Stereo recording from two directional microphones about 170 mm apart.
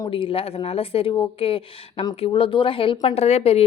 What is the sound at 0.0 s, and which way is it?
Speech, 30° left (ahead or behind).